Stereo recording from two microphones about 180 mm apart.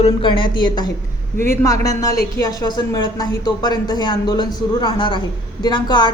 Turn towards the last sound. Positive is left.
turn(degrees=25)  # may be behind; listen again after turning